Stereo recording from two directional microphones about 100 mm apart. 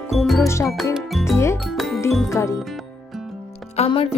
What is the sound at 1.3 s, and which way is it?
Music, 25° left (ahead or behind).